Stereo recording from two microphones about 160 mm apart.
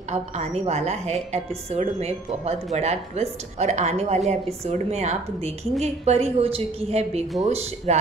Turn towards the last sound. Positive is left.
turn(degrees=-45)  # may be behind; listen again after turning